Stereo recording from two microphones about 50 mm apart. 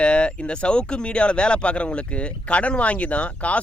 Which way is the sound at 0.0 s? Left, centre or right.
Left.